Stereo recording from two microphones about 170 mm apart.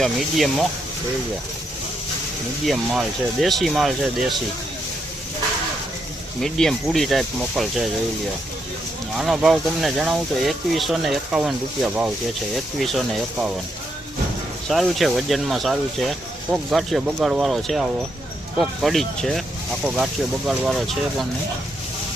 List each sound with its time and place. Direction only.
0.0 s speech: centre (ahead or behind)
2.6 s speech: centre (ahead or behind)
6.4 s speech: centre (ahead or behind)
9.1 s speech: centre (ahead or behind)
14.7 s speech: centre (ahead or behind)
20.5 s speech: centre (ahead or behind)